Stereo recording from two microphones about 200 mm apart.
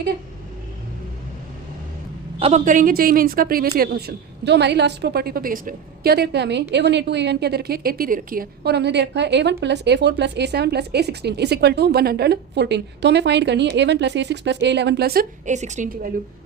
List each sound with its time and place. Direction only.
2.4 s a woman's voice: 35° right (ahead or behind)